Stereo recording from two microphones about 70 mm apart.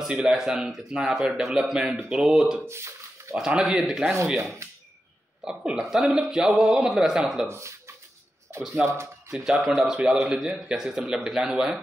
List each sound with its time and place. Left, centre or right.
0.2 s speech: centre
2.7 s a sound: right
3.3 s a man's voice: centre
5.4 s a man's voice: centre
7.4 s speech: right
8.5 s a sound: right
8.8 s speech: right
9.3 s a man's voice: centre